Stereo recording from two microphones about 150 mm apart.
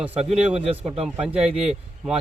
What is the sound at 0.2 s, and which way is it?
Speech, 45° right (ahead or behind).